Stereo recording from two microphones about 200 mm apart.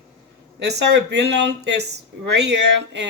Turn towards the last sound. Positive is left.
turn(degrees=-60)  # may be behind; listen again after turning